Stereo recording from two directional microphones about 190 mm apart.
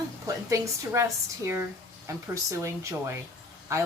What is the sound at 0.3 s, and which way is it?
A woman's voice, 15° right (ahead or behind).